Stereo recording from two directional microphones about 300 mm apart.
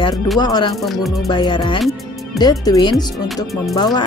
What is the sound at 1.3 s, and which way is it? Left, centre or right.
Speech, centre.